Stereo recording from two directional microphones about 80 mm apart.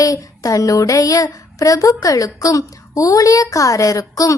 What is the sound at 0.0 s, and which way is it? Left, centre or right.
A woman's voice, left.